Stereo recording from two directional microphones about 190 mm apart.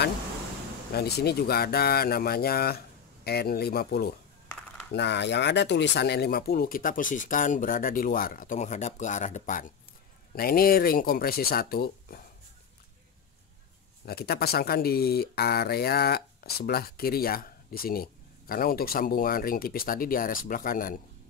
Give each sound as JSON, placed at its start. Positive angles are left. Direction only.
{"t": 0.9, "sound": "speech", "side_deg": 55}
{"t": 10.3, "sound": "speech", "side_deg": 50}
{"t": 14.0, "sound": "speech", "side_deg": 55}